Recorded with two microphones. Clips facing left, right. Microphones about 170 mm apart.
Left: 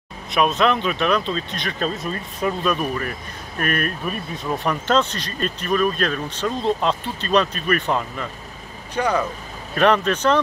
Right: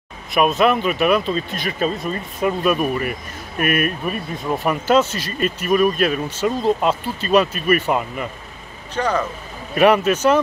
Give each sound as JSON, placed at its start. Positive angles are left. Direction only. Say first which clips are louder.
{"t": 0.3, "sound": "speech", "louder": "right 2 dB", "side_deg": 0}
{"t": 8.9, "sound": "speech", "louder": "even", "side_deg": 10}
{"t": 9.8, "sound": "speech", "louder": "right 3 dB", "side_deg": -10}